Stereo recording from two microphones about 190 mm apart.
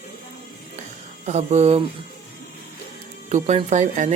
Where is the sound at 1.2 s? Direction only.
35° right (ahead or behind).